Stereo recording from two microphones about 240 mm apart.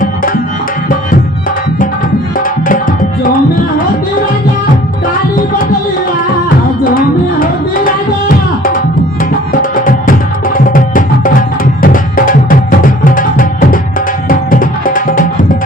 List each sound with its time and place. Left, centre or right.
2.4 s tabla: left
6.8 s music: left